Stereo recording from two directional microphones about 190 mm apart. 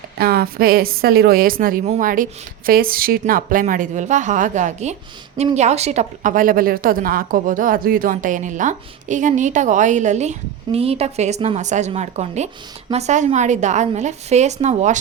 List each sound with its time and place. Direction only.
0.2 s a woman's voice: 55° right (ahead or behind); by 14.9 s 35° right (ahead or behind)